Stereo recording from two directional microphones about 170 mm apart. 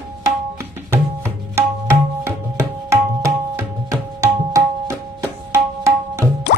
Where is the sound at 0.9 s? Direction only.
15° right (ahead or behind).